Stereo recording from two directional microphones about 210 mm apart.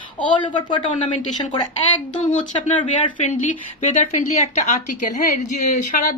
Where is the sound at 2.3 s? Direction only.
35° left (ahead or behind).